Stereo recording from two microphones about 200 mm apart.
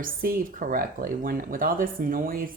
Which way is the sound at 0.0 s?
45° right (ahead or behind).